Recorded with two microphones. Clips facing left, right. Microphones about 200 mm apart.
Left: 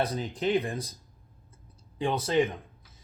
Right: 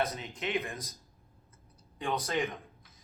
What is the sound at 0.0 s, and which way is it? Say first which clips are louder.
Speech: left 5 dB; 35° left (ahead or behind).